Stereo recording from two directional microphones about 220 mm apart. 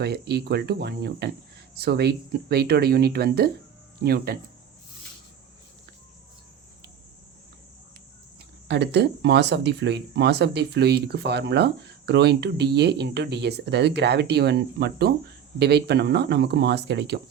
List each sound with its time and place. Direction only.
0.0 s speech: 45° right (ahead or behind)
8.6 s speech: 50° right (ahead or behind)